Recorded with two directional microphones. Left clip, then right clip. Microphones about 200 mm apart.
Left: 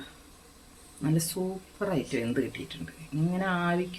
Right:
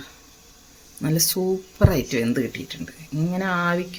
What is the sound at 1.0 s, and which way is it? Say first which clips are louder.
Speech: right 8 dB; 45° right (ahead or behind).